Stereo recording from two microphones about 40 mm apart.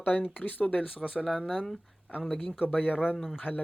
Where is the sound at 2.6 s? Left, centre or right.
Left.